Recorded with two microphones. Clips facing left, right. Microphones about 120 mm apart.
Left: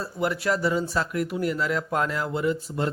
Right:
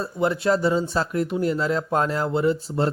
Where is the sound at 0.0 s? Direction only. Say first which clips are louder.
Right 4 dB; 25° right (ahead or behind).